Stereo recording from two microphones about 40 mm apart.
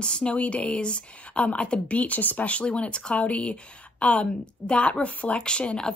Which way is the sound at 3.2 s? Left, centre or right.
Left.